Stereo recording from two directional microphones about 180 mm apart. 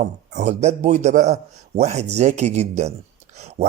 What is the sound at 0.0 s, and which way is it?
A man's voice, 40° right (ahead or behind).